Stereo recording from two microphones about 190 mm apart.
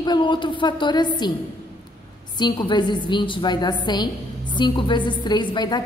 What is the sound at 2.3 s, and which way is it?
A woman's voice, 25° left (ahead or behind).